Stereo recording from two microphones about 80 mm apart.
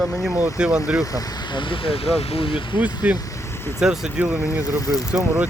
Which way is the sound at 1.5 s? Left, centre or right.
Left.